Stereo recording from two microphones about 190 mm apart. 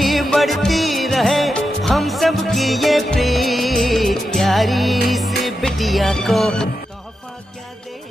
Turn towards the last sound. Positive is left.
turn(degrees=0)  # may be behind; listen again after turning